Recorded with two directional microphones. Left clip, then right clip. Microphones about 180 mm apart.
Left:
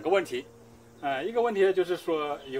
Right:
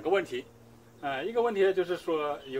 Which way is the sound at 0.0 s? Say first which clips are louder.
Left 2 dB; 30° left (ahead or behind).